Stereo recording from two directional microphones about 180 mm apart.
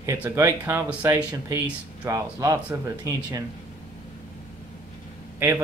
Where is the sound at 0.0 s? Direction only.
15° right (ahead or behind).